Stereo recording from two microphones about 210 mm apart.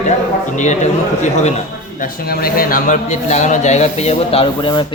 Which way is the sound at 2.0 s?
45° left (ahead or behind).